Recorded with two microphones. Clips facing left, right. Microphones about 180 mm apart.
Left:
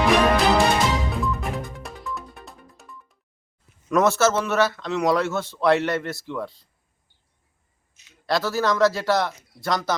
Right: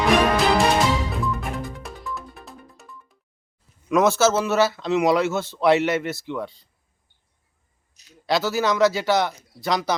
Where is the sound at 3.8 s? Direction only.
Centre (ahead or behind).